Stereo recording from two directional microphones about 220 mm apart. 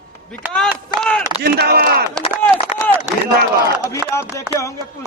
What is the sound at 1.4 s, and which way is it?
Speech, 45° right (ahead or behind).